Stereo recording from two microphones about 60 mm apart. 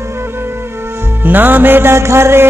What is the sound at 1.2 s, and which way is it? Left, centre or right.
Music, right.